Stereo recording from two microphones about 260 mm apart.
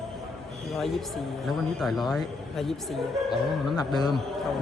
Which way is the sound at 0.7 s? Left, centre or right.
Centre.